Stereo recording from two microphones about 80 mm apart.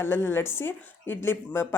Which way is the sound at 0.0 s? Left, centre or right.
Left.